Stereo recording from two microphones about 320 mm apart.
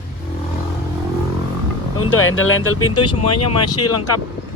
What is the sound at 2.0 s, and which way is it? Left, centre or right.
Speech, left.